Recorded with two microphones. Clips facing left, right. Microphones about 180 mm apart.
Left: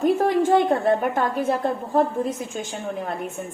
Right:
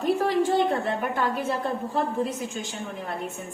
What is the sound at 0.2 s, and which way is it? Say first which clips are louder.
A woman's voice: left 4 dB; 50° left (ahead or behind).